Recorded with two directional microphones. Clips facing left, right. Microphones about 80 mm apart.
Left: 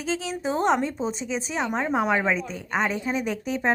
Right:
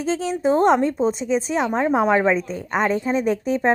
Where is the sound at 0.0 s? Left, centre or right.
Right.